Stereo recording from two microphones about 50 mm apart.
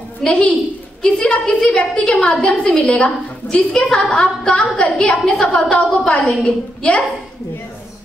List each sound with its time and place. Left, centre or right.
0.2 s a woman's voice: left